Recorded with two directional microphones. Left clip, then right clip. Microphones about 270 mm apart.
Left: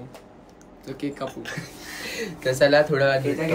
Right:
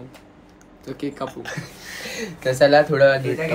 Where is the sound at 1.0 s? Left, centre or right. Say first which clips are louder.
Right 2 dB; centre.